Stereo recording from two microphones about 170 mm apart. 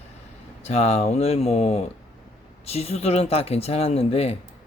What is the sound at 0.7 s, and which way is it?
Speech, 35° left (ahead or behind).